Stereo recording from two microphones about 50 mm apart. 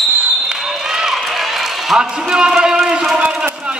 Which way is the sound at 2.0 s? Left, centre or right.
Centre.